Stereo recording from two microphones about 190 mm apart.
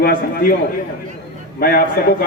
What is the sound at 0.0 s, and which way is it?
Speech, 55° left (ahead or behind).